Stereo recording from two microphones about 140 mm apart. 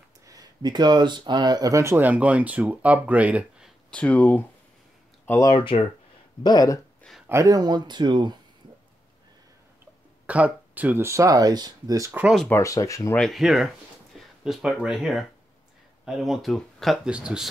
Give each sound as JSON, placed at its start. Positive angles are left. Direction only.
{"t": 0.3, "sound": "speech", "side_deg": -30}
{"t": 3.9, "sound": "speech", "side_deg": 10}
{"t": 5.4, "sound": "speech", "side_deg": 30}
{"t": 6.4, "sound": "speech", "side_deg": 25}
{"t": 7.0, "sound": "a sound", "side_deg": 0}
{"t": 7.2, "sound": "speech", "side_deg": -20}
{"t": 10.2, "sound": "speech", "side_deg": -10}
{"t": 12.1, "sound": "speech", "side_deg": -10}
{"t": 12.4, "sound": "speech", "side_deg": 20}
{"t": 13.1, "sound": "speech", "side_deg": 0}